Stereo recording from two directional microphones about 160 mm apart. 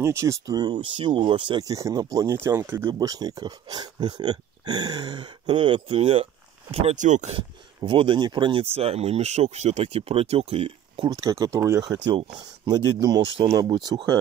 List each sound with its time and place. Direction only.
0.0 s speech: 20° right (ahead or behind)
2.9 s speech: 25° right (ahead or behind); by 7.3 s 50° right (ahead or behind)
7.3 s speech: 35° right (ahead or behind)
11.1 s speech: 20° right (ahead or behind)